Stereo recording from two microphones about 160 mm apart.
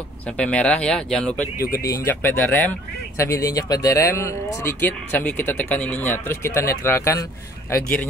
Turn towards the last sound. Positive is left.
turn(degrees=20)  # may be behind; listen again after turning